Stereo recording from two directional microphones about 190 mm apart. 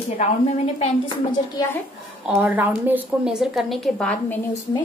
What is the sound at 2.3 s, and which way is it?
A woman's voice, 5° right (ahead or behind).